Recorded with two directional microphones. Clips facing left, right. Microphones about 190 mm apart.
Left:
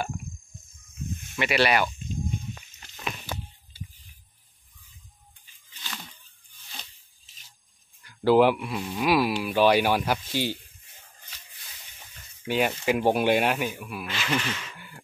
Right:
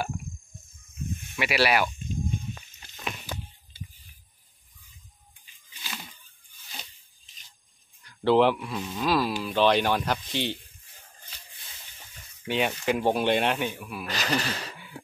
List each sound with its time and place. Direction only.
1.3 s speech: 5° right (ahead or behind)
5.7 s a sound: 10° right (ahead or behind)
8.0 s speech: 5° left (ahead or behind)
12.4 s speech: 5° left (ahead or behind)
14.0 s speech: 40° right (ahead or behind)